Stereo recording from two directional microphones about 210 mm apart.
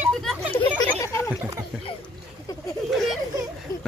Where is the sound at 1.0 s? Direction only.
15° left (ahead or behind).